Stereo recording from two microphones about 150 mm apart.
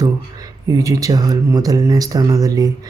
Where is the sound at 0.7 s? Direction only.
20° right (ahead or behind).